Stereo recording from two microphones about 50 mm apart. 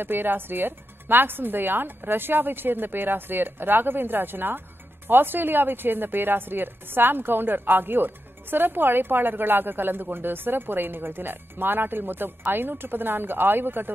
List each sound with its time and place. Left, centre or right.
0.0 s speech: right